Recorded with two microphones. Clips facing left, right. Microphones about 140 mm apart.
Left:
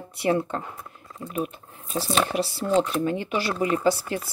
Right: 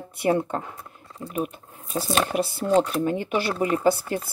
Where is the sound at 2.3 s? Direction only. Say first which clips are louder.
Right 4 dB; 50° right (ahead or behind).